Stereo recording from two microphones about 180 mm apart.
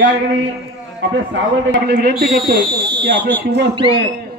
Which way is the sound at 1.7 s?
65° right (ahead or behind).